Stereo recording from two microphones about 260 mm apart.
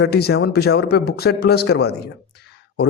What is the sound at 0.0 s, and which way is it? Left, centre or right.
A man's voice, left.